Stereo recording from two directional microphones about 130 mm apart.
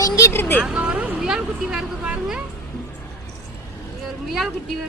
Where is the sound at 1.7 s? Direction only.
5° right (ahead or behind).